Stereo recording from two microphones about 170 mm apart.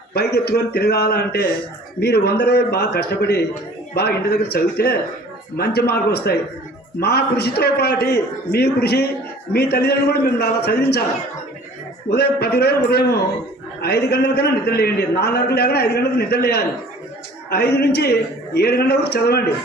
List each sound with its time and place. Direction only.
0.1 s a man's voice: 70° left (ahead or behind)
12.1 s a man's voice: 70° left (ahead or behind)